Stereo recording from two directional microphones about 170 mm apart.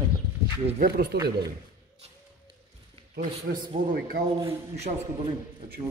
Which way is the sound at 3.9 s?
55° right (ahead or behind).